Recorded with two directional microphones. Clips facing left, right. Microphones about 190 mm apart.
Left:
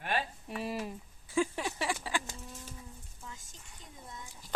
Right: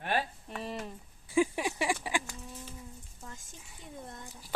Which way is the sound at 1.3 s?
15° right (ahead or behind).